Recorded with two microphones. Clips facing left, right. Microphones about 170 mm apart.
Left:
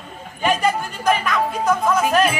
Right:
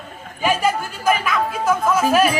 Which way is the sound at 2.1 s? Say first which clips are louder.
Right 1 dB; 5° right (ahead or behind).